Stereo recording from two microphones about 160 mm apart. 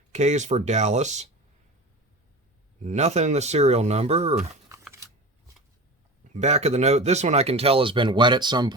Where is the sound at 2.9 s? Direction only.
45° right (ahead or behind).